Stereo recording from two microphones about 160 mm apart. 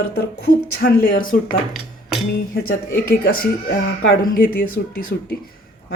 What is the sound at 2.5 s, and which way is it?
A woman's voice, 75° left (ahead or behind).